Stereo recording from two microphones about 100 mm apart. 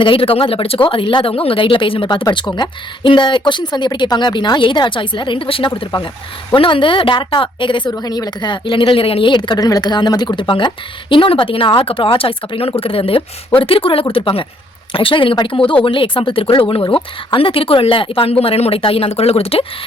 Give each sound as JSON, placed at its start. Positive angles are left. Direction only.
{"t": 0.0, "sound": "speech", "side_deg": 60}
{"t": 5.7, "sound": "speech", "side_deg": 50}
{"t": 7.9, "sound": "speech", "side_deg": 40}
{"t": 9.3, "sound": "speech", "side_deg": 50}